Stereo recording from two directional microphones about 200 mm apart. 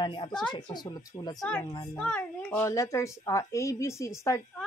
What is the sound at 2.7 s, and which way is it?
Speech, 15° left (ahead or behind).